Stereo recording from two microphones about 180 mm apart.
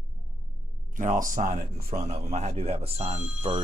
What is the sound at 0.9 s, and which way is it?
Speech, 45° right (ahead or behind).